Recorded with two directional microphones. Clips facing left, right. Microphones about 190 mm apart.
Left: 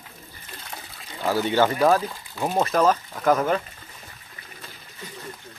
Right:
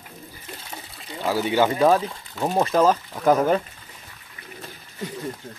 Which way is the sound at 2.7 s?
25° right (ahead or behind).